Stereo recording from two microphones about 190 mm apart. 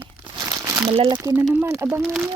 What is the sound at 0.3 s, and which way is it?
Crumpling, 20° right (ahead or behind).